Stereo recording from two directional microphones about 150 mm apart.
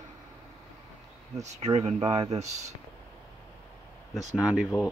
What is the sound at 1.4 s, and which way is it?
Speech, 50° right (ahead or behind).